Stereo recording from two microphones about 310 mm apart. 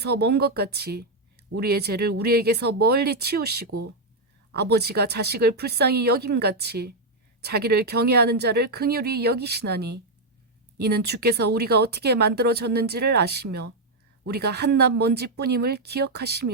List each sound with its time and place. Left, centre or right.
0.0 s speech: right
4.5 s speech: right